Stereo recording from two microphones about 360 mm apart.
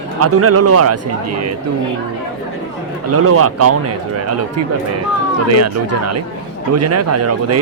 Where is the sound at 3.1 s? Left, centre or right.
Right.